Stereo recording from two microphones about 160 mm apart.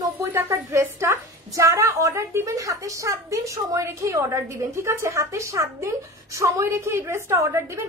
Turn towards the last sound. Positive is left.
turn(degrees=-20)  # may be behind; listen again after turning